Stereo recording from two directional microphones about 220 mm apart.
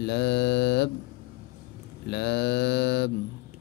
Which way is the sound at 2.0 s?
50° left (ahead or behind).